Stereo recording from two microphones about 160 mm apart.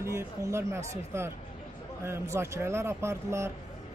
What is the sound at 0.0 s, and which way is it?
Speech, 15° right (ahead or behind).